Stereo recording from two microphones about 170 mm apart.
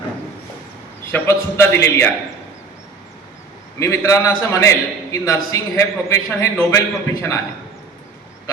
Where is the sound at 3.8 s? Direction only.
20° left (ahead or behind).